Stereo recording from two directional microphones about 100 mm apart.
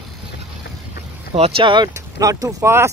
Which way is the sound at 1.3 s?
80° right.